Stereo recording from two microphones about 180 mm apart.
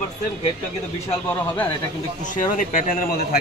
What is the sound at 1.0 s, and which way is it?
Speech, 10° left (ahead or behind).